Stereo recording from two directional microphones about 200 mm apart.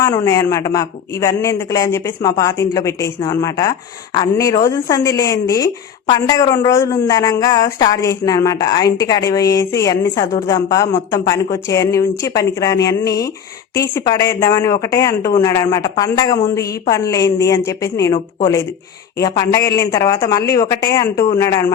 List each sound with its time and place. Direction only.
0.0 s a woman's voice: 15° left (ahead or behind)